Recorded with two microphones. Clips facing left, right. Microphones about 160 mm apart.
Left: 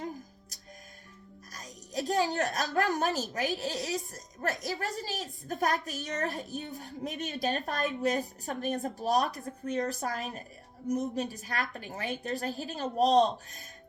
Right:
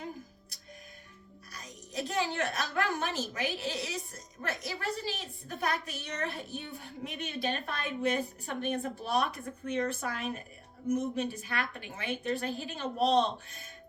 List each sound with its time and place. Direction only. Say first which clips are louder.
0.5 s music: left 2 dB; 40° left (ahead or behind)
1.5 s a woman's voice: left 2 dB; 40° left (ahead or behind)